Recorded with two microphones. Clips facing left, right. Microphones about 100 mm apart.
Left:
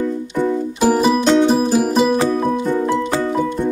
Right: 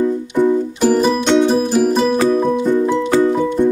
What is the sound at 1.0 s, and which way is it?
Music, 5° left (ahead or behind).